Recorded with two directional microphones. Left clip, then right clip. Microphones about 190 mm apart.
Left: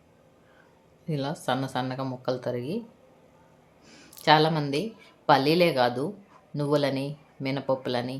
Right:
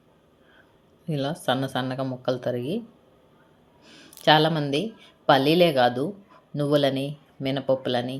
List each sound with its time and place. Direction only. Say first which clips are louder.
1.0 s speech: right 3 dB; 10° right (ahead or behind)
3.8 s speech: right 2 dB; centre (ahead or behind)